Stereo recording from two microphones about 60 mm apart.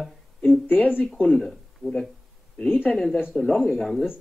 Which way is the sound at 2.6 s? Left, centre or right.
Left.